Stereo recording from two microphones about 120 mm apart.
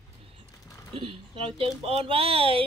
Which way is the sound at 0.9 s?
50° right (ahead or behind).